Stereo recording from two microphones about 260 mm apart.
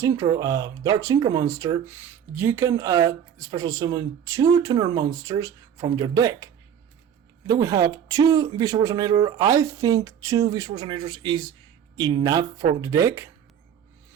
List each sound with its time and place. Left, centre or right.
0.0 s speech: centre
7.6 s speech: centre